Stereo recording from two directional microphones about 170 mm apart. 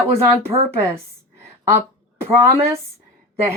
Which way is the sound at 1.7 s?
15° right (ahead or behind).